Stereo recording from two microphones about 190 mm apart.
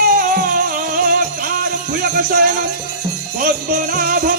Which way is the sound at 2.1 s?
50° right (ahead or behind).